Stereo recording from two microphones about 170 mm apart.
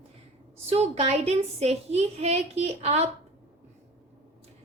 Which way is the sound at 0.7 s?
35° right (ahead or behind).